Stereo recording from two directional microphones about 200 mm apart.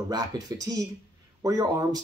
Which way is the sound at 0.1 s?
20° right (ahead or behind).